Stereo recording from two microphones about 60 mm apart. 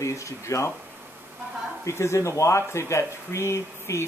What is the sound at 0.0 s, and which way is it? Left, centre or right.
Speech, left.